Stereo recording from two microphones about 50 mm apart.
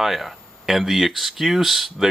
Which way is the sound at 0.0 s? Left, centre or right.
Centre.